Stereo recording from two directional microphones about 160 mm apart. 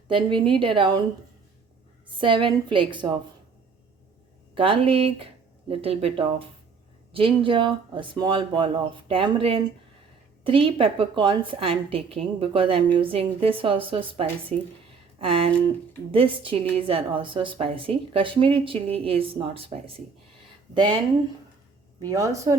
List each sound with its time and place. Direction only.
0.1 s a woman's voice: 30° right (ahead or behind)
2.1 s a woman's voice: 30° right (ahead or behind)
4.5 s a woman's voice: 35° right (ahead or behind)
14.5 s a woman's voice: 45° right (ahead or behind)
22.0 s speech: 20° right (ahead or behind)